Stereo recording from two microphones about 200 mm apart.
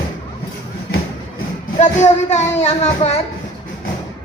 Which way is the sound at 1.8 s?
35° left (ahead or behind).